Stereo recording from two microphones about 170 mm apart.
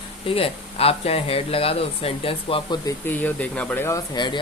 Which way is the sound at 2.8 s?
10° left (ahead or behind).